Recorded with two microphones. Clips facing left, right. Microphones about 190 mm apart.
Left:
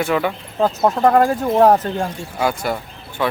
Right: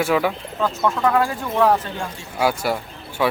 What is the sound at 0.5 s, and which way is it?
Speech, 35° left (ahead or behind).